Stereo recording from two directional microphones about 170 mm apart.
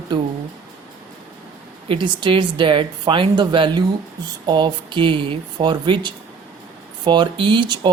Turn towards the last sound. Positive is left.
turn(degrees=-30)  # may be behind; listen again after turning